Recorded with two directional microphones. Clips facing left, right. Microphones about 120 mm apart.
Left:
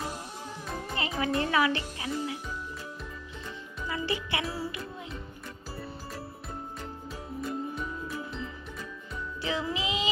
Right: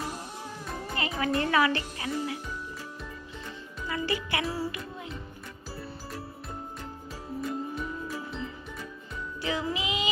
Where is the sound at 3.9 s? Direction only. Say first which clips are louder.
Right 1 dB; 20° left (ahead or behind).